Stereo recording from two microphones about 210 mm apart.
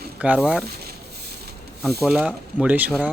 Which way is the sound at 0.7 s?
50° right (ahead or behind).